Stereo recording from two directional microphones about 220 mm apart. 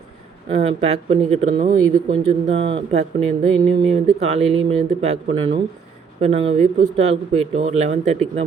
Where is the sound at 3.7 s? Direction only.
30° right (ahead or behind).